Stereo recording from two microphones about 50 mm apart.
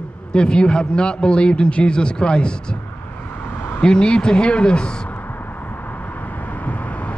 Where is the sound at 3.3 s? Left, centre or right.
Left.